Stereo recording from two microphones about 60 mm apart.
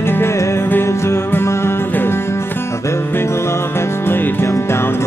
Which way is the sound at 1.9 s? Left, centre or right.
Left.